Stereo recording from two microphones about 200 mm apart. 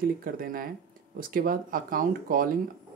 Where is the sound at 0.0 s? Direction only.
45° right (ahead or behind).